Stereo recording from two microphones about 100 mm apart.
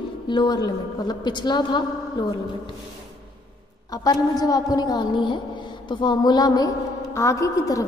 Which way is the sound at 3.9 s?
40° left (ahead or behind).